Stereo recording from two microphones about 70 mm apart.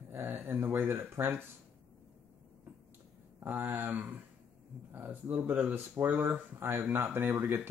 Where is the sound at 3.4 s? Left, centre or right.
Right.